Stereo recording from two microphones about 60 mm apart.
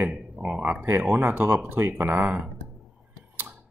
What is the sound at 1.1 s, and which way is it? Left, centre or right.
Speech, right.